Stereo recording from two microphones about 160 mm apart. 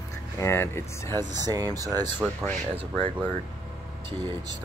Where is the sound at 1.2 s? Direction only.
25° right (ahead or behind).